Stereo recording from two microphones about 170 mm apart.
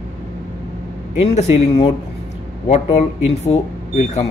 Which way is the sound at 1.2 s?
35° left (ahead or behind).